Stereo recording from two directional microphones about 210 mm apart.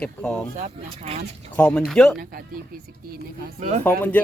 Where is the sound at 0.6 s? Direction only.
30° right (ahead or behind).